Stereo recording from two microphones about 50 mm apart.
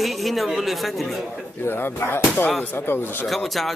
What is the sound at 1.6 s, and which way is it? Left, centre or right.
Speech, left.